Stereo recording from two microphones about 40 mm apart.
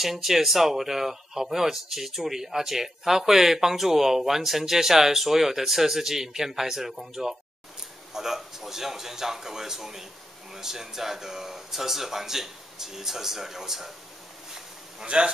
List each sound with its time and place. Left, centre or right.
0.0 s speech: centre
15.0 s speech: right